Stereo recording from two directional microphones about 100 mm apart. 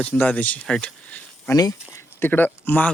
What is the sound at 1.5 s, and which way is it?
Speech, 35° left (ahead or behind).